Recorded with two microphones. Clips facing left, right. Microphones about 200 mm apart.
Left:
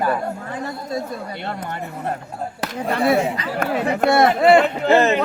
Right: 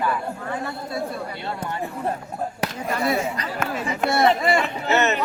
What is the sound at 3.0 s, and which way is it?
Speech, 55° left (ahead or behind).